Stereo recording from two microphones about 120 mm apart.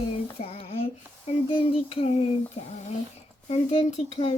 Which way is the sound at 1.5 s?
50° left (ahead or behind).